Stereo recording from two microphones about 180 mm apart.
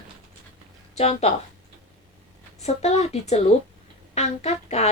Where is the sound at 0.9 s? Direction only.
35° left (ahead or behind).